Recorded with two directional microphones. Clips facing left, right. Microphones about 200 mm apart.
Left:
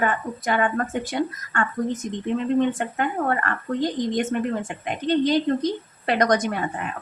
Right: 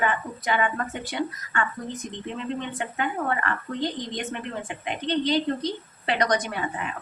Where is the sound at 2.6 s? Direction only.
45° left (ahead or behind).